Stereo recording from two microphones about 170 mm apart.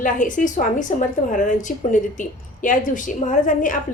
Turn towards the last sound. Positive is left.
turn(degrees=50)  # may be behind; listen again after turning